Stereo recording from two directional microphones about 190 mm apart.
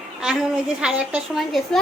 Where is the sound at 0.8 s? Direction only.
5° right (ahead or behind).